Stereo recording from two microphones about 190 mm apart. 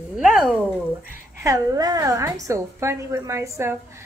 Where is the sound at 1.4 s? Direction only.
15° right (ahead or behind).